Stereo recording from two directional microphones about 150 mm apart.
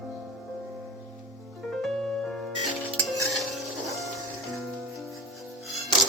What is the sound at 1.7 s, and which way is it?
Music, centre (ahead or behind).